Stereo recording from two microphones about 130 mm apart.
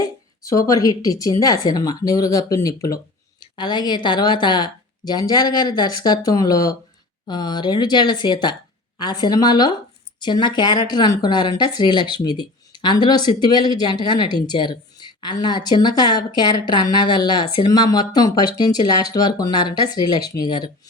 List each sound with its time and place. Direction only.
0.4 s a woman's voice: 25° left (ahead or behind)